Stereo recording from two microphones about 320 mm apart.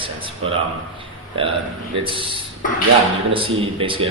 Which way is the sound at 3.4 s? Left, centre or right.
Centre.